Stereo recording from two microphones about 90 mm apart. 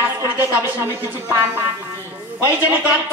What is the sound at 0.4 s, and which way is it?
Speech, 20° right (ahead or behind).